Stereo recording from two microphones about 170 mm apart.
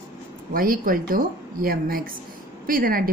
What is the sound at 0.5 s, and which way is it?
A woman's voice, 55° right (ahead or behind).